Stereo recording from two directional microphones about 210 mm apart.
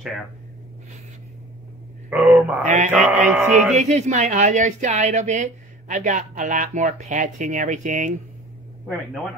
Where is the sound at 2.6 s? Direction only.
35° right (ahead or behind).